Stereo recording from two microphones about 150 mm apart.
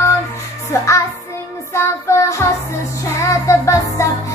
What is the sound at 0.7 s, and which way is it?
Music, 20° left (ahead or behind).